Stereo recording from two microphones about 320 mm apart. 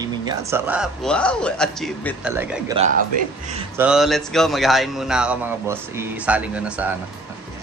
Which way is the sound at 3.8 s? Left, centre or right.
Centre.